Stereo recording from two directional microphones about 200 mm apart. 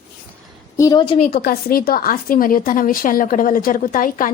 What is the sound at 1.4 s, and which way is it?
A woman's voice, 45° left (ahead or behind).